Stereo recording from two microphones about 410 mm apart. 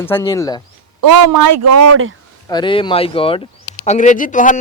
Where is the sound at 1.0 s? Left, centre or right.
Right.